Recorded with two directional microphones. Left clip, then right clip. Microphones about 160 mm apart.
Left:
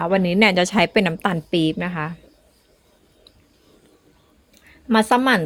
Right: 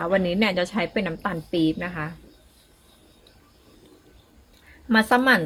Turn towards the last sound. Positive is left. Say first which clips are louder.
# left 2 dB
turn(degrees=65)  # may be behind; listen again after turning